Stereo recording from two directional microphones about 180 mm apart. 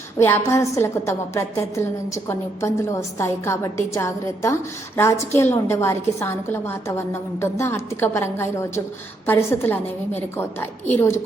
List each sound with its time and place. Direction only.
0.2 s a woman's voice: 15° left (ahead or behind)